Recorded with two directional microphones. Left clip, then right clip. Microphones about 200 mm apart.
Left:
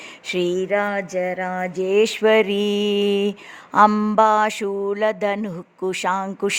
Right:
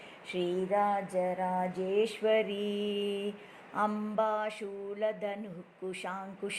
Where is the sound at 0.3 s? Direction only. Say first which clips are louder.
Left 9 dB; 45° left (ahead or behind).